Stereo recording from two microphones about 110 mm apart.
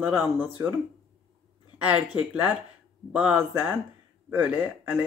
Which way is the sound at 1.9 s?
10° right (ahead or behind).